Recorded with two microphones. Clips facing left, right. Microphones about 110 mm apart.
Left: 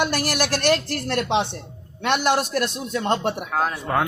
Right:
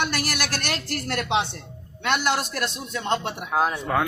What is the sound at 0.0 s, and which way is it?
A woman's voice, 45° left (ahead or behind).